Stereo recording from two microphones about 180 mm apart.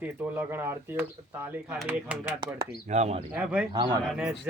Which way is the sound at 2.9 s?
40° right (ahead or behind).